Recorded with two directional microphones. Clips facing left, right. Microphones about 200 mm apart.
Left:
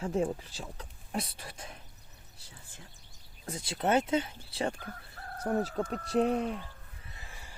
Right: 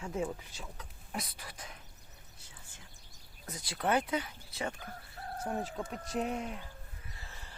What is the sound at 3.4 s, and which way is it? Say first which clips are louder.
Speech: left 3 dB; 25° left (ahead or behind).